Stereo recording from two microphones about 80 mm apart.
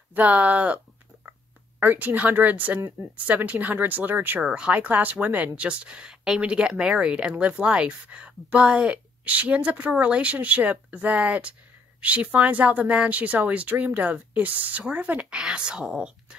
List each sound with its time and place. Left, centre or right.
0.1 s speech: centre
1.8 s speech: right
4.4 s speech: centre